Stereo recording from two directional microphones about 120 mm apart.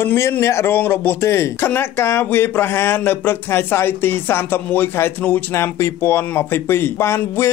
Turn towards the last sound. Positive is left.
turn(degrees=20)  # may be behind; listen again after turning